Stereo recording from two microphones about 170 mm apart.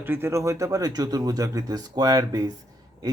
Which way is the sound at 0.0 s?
15° right (ahead or behind).